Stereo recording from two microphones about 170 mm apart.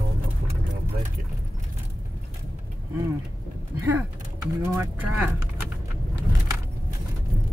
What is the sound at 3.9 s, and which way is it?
Speech, 15° right (ahead or behind).